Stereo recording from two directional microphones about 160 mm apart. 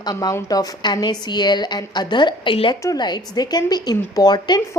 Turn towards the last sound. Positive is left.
turn(degrees=25)  # may be behind; listen again after turning